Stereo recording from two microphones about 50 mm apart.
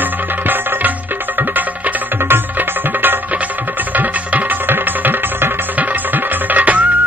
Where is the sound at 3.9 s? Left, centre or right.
Right.